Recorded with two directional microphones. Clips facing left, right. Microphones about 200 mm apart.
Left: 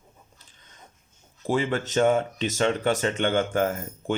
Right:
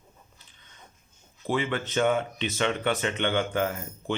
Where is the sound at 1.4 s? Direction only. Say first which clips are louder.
Left 3 dB; 40° left (ahead or behind).